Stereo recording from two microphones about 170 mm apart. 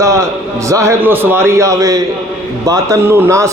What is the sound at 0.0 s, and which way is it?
A man's voice, 15° right (ahead or behind).